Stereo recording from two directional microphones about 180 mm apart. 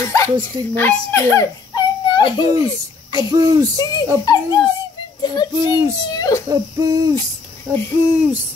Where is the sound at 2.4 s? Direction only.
20° right (ahead or behind).